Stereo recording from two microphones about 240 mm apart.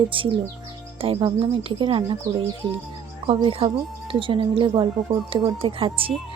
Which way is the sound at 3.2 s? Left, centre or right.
Right.